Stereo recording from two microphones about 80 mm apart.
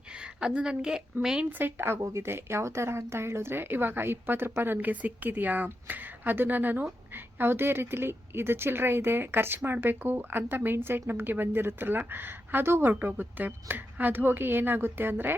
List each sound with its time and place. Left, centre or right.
0.1 s a woman's voice: centre
1.5 s a woman's voice: right